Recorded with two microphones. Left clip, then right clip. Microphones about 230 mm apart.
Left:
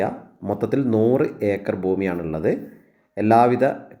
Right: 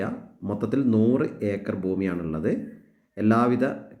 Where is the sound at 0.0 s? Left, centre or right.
Centre.